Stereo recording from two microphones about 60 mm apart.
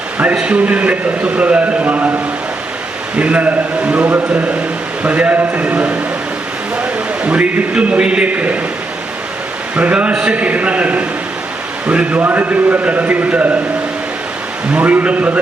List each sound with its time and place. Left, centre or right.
0.3 s speech: right
3.2 s speech: right
7.3 s speech: right
9.7 s speech: right
14.7 s speech: right